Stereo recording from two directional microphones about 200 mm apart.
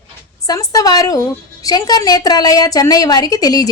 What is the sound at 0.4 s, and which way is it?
A woman's voice, 15° left (ahead or behind).